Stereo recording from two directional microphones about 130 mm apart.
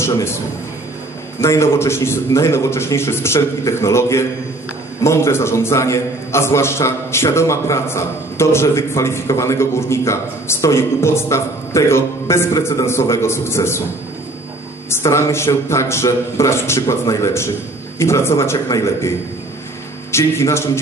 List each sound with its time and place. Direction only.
1.4 s a man's voice: 20° left (ahead or behind)
14.9 s a man's voice: 20° left (ahead or behind)